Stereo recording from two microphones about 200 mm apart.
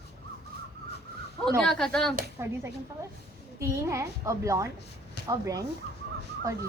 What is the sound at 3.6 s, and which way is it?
Speech, 15° right (ahead or behind).